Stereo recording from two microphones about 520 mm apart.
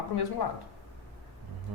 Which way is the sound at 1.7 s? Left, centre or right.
Right.